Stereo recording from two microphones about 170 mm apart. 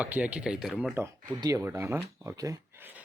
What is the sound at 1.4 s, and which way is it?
Speech, 20° right (ahead or behind).